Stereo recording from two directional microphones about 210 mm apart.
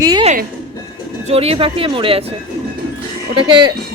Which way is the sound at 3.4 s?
20° right (ahead or behind).